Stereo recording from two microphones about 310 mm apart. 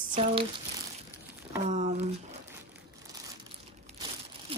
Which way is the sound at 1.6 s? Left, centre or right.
Right.